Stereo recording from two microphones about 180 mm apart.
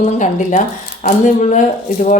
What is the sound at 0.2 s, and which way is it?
A woman's voice, 45° left (ahead or behind).